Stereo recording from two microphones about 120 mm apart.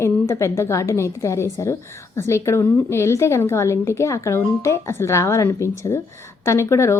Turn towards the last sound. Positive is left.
turn(degrees=25)  # may be behind; listen again after turning